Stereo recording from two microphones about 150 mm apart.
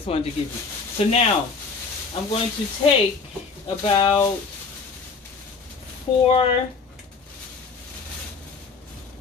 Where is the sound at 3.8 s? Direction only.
40° left (ahead or behind).